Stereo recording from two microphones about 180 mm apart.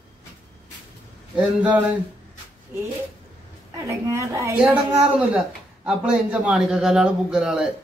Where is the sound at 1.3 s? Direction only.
5° right (ahead or behind).